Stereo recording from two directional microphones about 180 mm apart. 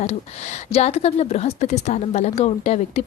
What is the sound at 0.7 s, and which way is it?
A woman's voice, 35° left (ahead or behind).